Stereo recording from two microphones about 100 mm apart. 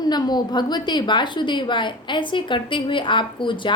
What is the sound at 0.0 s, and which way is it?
A woman's voice, 45° left (ahead or behind).